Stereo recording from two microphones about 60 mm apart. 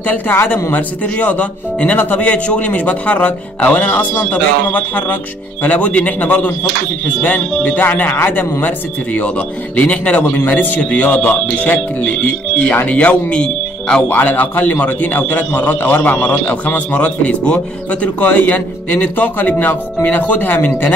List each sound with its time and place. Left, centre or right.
0.0 s speech: left; by 14.0 s centre
14.0 s speech: left